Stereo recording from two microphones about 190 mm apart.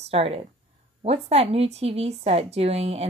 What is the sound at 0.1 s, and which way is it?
A woman's voice, 30° right (ahead or behind).